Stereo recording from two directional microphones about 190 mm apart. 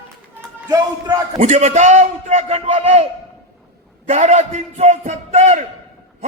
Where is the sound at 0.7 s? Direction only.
20° right (ahead or behind).